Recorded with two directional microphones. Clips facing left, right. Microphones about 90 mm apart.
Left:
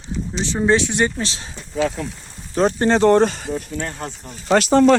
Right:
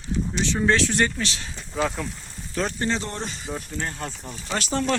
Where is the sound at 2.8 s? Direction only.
65° left (ahead or behind).